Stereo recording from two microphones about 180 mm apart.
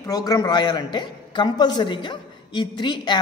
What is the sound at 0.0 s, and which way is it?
A man's voice, 20° left (ahead or behind).